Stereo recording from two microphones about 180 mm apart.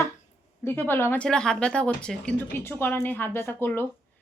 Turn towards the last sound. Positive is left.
turn(degrees=10)  # may be behind; listen again after turning